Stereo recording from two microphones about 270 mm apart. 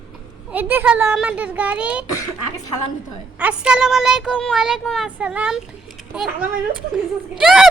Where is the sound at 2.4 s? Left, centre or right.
Centre.